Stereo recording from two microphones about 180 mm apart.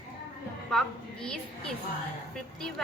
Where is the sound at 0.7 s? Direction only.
5° left (ahead or behind).